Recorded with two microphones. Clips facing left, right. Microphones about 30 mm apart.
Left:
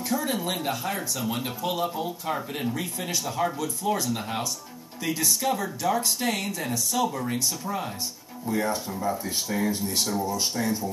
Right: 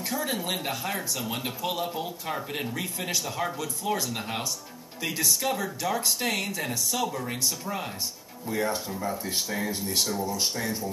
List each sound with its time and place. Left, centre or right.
0.1 s speech: centre